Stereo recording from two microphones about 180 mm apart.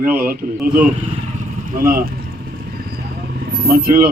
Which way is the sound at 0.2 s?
55° right (ahead or behind).